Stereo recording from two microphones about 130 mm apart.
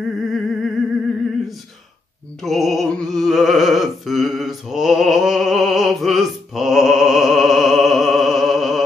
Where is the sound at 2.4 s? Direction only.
Centre (ahead or behind).